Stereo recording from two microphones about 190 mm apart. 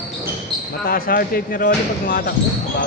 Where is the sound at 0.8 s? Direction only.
50° left (ahead or behind).